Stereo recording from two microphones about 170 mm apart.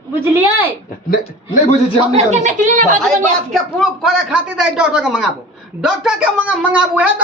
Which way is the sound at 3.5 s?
Centre (ahead or behind).